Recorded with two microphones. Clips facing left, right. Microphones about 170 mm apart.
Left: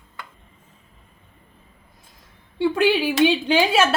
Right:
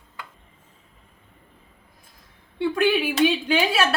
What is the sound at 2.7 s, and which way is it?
Speech, 30° left (ahead or behind).